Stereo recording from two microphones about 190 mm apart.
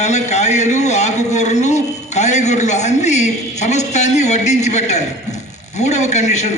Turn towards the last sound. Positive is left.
turn(degrees=35)  # may be behind; listen again after turning